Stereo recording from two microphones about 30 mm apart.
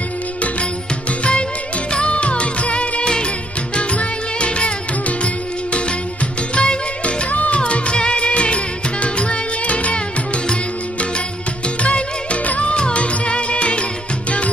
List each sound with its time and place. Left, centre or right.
1.9 s music: left
7.2 s music: left
11.8 s music: left